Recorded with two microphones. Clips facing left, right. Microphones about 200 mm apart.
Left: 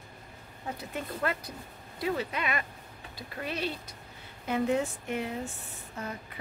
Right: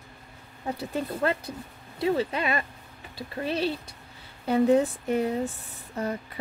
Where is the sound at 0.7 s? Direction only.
30° right (ahead or behind).